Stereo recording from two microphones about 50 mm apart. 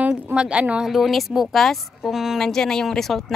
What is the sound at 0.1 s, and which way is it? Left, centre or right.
Speech, centre.